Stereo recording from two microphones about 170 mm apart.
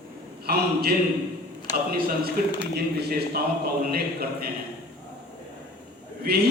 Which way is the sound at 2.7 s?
70° right (ahead or behind).